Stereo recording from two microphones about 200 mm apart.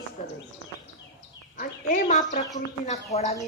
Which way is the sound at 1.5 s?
40° left (ahead or behind).